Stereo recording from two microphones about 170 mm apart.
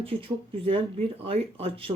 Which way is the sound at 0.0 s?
30° right (ahead or behind).